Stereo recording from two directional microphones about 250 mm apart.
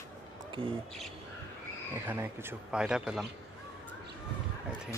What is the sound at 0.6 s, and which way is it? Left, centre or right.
Speech, right.